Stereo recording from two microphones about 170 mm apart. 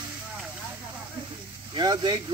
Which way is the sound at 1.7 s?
25° right (ahead or behind).